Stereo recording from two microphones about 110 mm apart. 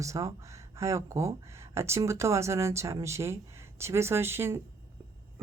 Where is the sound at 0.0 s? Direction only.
30° right (ahead or behind).